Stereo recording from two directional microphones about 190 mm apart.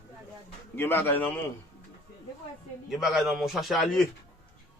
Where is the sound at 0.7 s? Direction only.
10° left (ahead or behind).